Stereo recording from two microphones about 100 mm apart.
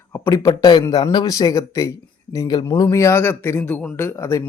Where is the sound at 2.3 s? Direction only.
45° left (ahead or behind).